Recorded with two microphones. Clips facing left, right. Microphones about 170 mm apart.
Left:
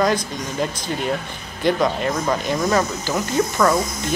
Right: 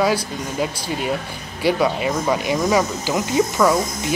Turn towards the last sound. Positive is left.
turn(degrees=-10)  # may be behind; listen again after turning